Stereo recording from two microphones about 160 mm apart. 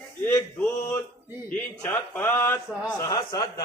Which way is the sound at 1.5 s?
10° left (ahead or behind).